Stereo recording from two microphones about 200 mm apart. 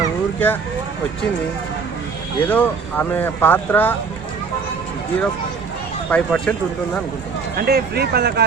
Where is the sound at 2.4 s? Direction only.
10° left (ahead or behind).